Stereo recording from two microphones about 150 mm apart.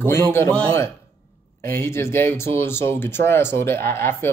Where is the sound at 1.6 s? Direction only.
15° left (ahead or behind).